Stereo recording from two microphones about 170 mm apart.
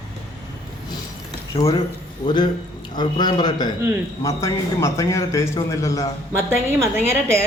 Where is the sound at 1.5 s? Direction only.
35° left (ahead or behind).